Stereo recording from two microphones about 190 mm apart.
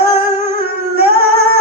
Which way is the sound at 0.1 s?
55° right (ahead or behind).